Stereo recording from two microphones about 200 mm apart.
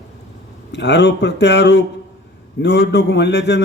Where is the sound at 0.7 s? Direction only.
60° left (ahead or behind).